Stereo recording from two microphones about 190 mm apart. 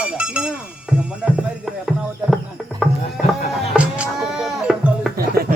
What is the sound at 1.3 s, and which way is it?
Clip-clop, centre (ahead or behind).